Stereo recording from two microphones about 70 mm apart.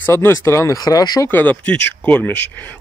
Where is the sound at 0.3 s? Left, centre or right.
Left.